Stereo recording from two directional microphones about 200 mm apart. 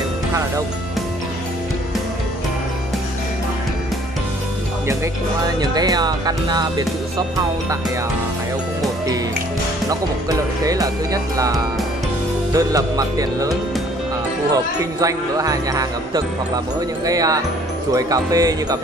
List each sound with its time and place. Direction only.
5.6 s speech: 20° right (ahead or behind)
10.6 s speech: 15° right (ahead or behind)
14.5 s speech: 15° right (ahead or behind)